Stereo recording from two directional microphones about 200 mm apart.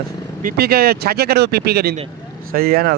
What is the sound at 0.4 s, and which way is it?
Speech, 50° right (ahead or behind).